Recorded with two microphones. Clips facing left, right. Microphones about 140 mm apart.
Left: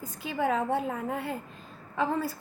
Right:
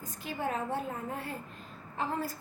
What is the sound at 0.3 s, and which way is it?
Speech, 90° left.